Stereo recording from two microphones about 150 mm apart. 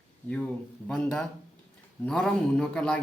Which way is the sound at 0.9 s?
5° left (ahead or behind).